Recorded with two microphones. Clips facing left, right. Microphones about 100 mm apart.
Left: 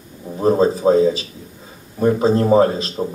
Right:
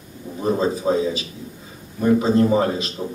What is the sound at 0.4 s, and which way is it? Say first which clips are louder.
A man's voice: left 6 dB; 40° left (ahead or behind).